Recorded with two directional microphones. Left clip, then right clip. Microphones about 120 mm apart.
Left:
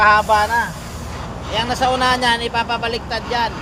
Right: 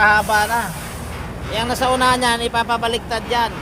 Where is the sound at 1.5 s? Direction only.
40° right (ahead or behind).